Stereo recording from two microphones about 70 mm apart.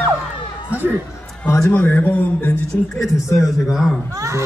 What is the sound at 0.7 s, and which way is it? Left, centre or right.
Speech, right.